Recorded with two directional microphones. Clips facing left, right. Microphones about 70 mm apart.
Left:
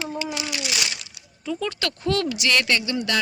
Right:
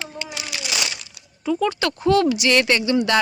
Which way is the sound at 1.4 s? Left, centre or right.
Centre.